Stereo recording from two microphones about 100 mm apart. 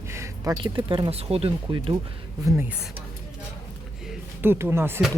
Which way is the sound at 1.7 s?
65° right (ahead or behind).